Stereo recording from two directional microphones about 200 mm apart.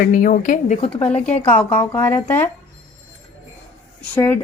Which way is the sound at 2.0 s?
10° left (ahead or behind).